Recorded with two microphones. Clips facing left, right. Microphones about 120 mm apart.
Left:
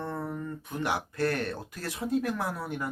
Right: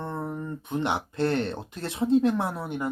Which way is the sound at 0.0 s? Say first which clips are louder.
Right 2 dB; 20° right (ahead or behind).